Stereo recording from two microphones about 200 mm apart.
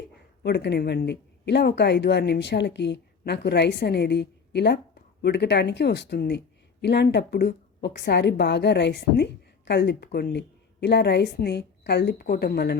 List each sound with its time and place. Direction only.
0.4 s speech: 55° left (ahead or behind)